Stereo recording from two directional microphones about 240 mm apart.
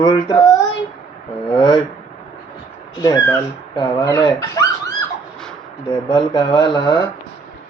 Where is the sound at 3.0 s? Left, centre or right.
Centre.